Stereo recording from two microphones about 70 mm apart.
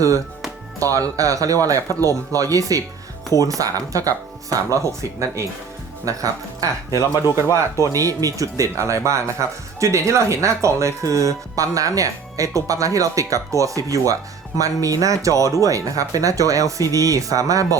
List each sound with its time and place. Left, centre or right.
0.8 s speech: right